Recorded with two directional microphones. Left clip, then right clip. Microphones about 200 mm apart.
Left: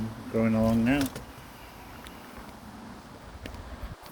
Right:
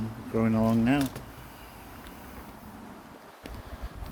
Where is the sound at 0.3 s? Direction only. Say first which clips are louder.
Even; 15° right (ahead or behind).